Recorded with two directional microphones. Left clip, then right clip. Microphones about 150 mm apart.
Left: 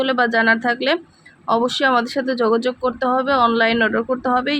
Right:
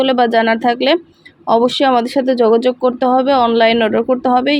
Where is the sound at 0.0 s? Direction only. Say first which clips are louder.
Right 4 dB; 20° right (ahead or behind).